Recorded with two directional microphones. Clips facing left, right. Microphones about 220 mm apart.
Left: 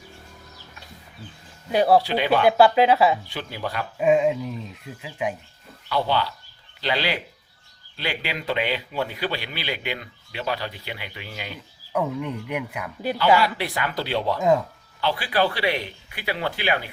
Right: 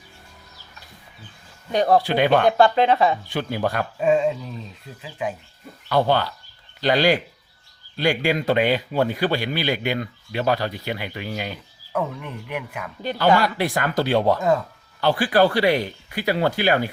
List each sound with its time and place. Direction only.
1.7 s speech: 5° left (ahead or behind)
2.0 s a man's voice: 50° right (ahead or behind)
2.5 s speech: 5° left (ahead or behind)
3.2 s a man's voice: 50° right (ahead or behind)
3.9 s speech: 10° left (ahead or behind)
5.9 s a man's voice: 50° right (ahead or behind)
11.9 s speech: 15° left (ahead or behind)
13.4 s a man's voice: 45° right (ahead or behind)